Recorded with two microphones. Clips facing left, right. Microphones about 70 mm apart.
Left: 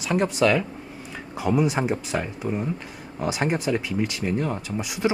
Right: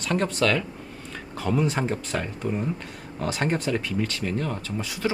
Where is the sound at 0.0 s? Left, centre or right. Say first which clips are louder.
Left 3 dB; centre.